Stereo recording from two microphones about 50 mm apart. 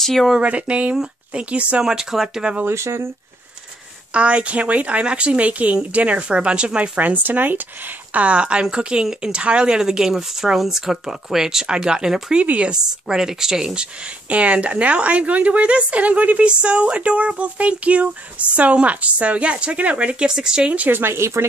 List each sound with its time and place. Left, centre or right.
0.0 s speech: centre
0.4 s a woman's voice: right
1.8 s speech: centre
2.6 s speech: right
4.1 s a woman's voice: right
7.0 s speech: right
8.2 s speech: right
12.4 s a woman's voice: right
13.1 s speech: centre
14.3 s a woman's voice: right
20.2 s speech: centre
20.9 s speech: right